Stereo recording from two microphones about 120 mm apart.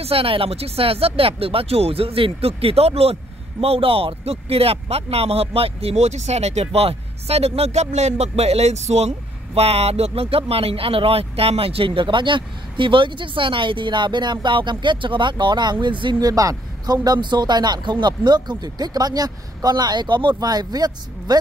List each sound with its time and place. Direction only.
0.0 s speech: 50° right (ahead or behind); by 21.4 s 35° right (ahead or behind)